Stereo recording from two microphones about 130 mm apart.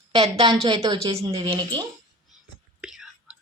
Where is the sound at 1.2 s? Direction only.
30° right (ahead or behind).